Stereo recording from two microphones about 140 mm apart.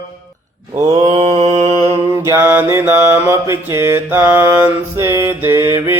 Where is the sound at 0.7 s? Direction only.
25° right (ahead or behind).